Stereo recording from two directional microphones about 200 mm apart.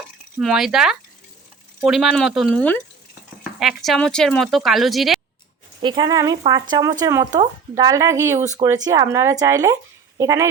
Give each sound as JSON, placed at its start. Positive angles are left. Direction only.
{"t": 0.3, "sound": "speech", "side_deg": 0}
{"t": 5.8, "sound": "speech", "side_deg": -25}